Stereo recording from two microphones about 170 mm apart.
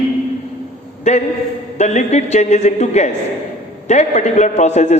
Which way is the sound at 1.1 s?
40° left (ahead or behind).